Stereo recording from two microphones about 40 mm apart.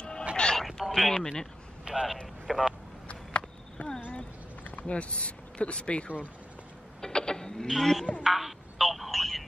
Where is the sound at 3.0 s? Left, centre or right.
Left.